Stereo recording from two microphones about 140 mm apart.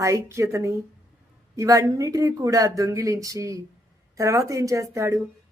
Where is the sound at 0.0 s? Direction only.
20° right (ahead or behind).